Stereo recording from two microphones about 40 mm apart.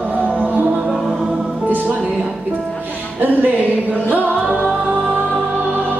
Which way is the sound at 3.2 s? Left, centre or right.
Right.